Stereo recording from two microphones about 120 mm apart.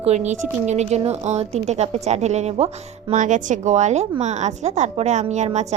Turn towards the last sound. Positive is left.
turn(degrees=-75)  # may be behind; listen again after turning